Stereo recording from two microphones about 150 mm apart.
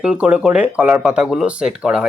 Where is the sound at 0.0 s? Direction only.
5° right (ahead or behind).